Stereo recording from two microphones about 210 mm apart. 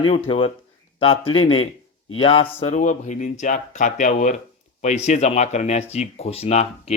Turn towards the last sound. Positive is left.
turn(degrees=30)  # may be behind; listen again after turning